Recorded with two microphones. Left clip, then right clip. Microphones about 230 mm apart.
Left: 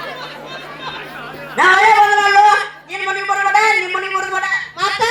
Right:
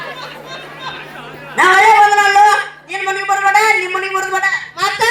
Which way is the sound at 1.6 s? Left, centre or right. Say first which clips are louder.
Right 2 dB; right.